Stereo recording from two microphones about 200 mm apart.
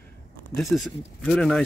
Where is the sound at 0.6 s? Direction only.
Centre (ahead or behind).